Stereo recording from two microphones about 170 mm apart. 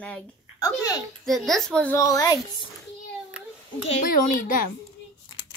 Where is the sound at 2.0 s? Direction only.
20° left (ahead or behind).